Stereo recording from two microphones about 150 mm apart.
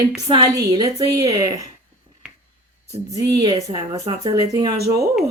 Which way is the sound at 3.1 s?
25° right (ahead or behind).